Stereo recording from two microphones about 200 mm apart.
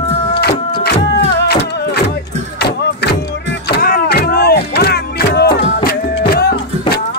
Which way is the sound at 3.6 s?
50° left (ahead or behind).